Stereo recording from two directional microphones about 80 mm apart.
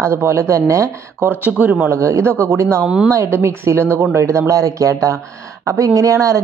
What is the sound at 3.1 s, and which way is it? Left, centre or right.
Speech, right.